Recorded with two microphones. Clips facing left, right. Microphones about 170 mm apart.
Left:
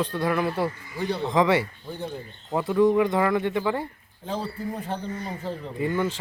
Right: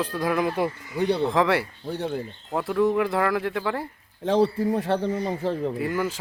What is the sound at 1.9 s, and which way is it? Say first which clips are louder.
Speech: right 5 dB; 80° right.